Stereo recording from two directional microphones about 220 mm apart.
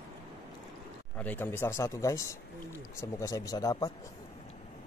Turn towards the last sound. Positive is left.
turn(degrees=15)  # may be behind; listen again after turning